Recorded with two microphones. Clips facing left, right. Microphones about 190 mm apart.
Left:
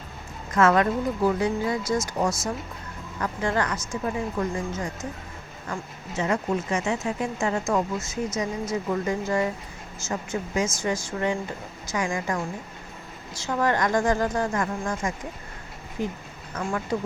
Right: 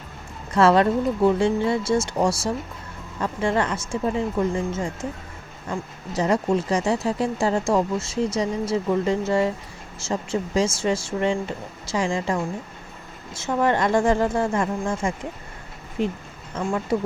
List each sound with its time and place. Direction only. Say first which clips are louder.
0.5 s speech: right 3 dB; 30° right (ahead or behind)
6.1 s speech: right 4 dB; 35° right (ahead or behind)
16.0 s speech: right 5 dB; 70° right (ahead or behind)
16.6 s speech: right 4 dB; 20° right (ahead or behind)